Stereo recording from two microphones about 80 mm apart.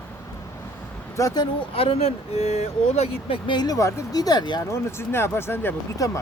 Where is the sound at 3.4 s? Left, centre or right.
Left.